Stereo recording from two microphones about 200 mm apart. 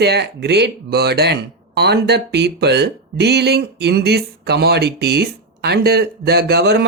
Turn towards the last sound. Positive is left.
turn(degrees=-55)  # may be behind; listen again after turning